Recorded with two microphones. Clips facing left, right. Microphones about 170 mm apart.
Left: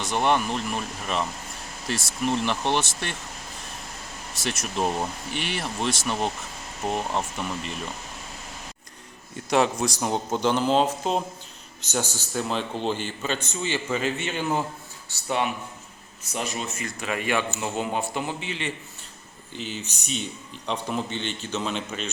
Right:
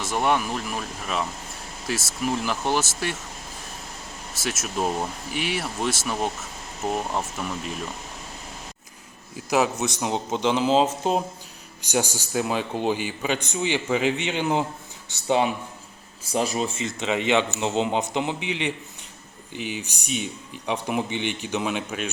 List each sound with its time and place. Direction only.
0.0 s speech: 5° right (ahead or behind)
4.4 s speech: 5° right (ahead or behind)
9.3 s a man's voice: 5° right (ahead or behind)